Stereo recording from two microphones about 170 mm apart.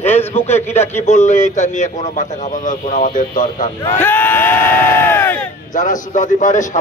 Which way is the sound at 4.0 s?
10° left (ahead or behind).